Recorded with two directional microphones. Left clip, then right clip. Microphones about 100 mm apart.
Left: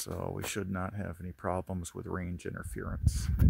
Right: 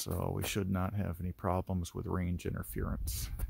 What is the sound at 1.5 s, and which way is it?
Speech, 10° right (ahead or behind).